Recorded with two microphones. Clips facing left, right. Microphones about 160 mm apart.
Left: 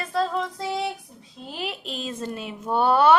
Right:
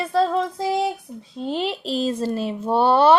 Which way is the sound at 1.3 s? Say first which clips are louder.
Right 8 dB; 30° right (ahead or behind).